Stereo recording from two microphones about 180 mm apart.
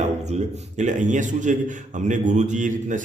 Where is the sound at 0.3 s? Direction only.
40° right (ahead or behind).